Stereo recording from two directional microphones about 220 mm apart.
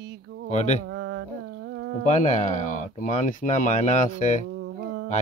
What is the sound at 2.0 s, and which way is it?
A man's voice, 30° left (ahead or behind).